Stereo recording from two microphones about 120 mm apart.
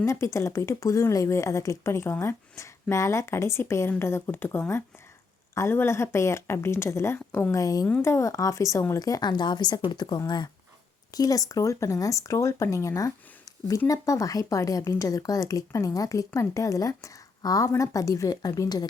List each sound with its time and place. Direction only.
0.0 s speech: 25° left (ahead or behind)
7.6 s a woman's voice: 30° left (ahead or behind)